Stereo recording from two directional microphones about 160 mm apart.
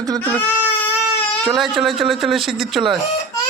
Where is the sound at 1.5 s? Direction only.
Centre (ahead or behind).